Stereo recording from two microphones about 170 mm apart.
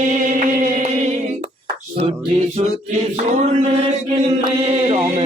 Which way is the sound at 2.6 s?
45° right (ahead or behind).